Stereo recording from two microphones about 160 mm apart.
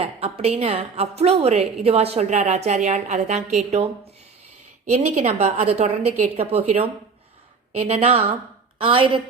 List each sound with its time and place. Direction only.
0.0 s a woman's voice: 40° right (ahead or behind)
4.9 s a woman's voice: 45° right (ahead or behind)